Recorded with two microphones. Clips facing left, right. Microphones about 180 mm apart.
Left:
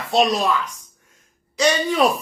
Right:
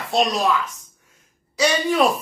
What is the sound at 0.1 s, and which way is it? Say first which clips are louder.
Speech: left 2 dB; centre (ahead or behind).